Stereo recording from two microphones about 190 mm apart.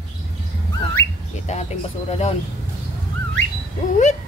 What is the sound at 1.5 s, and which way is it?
Speech, 35° left (ahead or behind).